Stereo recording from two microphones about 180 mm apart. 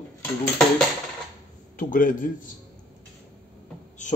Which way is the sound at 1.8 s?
50° left (ahead or behind).